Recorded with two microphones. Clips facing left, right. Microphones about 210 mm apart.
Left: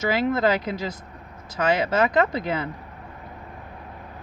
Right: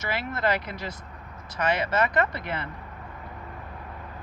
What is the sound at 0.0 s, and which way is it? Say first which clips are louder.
Speech: left 7 dB; 90° left.